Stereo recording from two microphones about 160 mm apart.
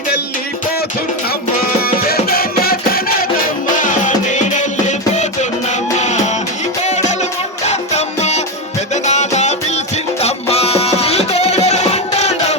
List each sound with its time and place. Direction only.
1.8 s music: 70° left (ahead or behind)
3.8 s music: 55° left (ahead or behind)